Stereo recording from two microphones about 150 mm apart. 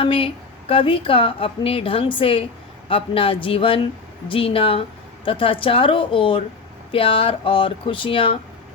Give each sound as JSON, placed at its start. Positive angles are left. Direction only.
{"t": 0.0, "sound": "a woman's voice", "side_deg": 35}